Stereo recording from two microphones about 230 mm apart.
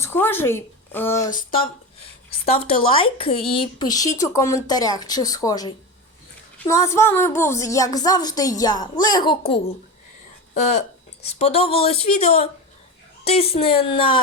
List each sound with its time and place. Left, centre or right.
0.0 s speech: centre
2.5 s speech: left
10.8 s speech: left